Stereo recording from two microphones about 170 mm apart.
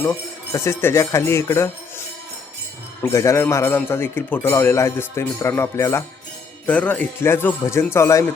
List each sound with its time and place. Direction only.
0.0 s speech: 15° left (ahead or behind)
3.0 s speech: 15° left (ahead or behind)